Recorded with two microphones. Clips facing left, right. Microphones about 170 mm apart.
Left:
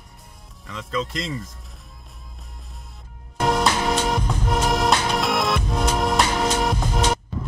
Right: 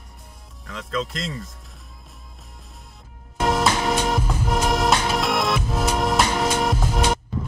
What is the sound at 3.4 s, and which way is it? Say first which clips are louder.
Music: even; centre (ahead or behind).